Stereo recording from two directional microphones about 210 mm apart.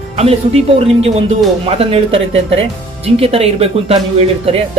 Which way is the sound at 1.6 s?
25° right (ahead or behind).